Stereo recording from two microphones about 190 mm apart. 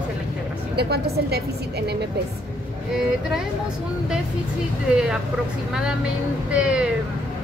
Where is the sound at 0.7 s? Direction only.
55° right (ahead or behind).